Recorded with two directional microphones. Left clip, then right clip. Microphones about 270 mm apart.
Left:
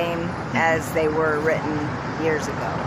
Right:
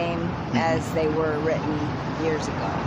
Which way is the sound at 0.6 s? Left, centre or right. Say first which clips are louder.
Left 4 dB; centre.